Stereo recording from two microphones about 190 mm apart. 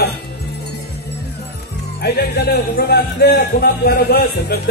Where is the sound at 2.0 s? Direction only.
60° left (ahead or behind).